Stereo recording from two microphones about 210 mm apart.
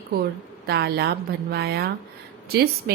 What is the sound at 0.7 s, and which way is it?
Speech, 50° right (ahead or behind).